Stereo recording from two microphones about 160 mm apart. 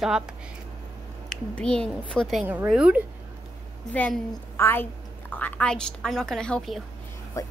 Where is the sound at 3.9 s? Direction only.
10° left (ahead or behind).